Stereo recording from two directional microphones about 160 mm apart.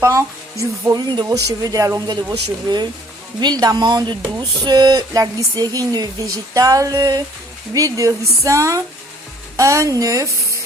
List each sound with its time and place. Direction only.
0.0 s speech: 20° right (ahead or behind)
3.4 s speech: 25° right (ahead or behind)